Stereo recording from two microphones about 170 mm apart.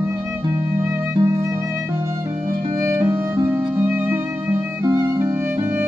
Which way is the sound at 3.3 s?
15° right (ahead or behind).